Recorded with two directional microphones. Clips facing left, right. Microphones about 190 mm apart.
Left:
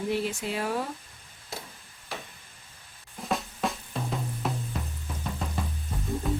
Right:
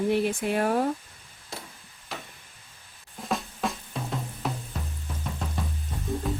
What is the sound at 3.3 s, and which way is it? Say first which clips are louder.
Drum: even; centre (ahead or behind).